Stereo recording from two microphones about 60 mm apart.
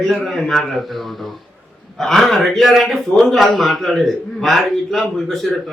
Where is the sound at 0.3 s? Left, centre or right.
Centre.